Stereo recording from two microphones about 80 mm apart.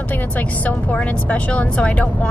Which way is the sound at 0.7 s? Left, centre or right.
Centre.